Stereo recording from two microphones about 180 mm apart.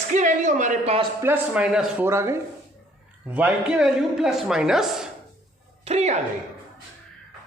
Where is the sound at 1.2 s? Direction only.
10° right (ahead or behind).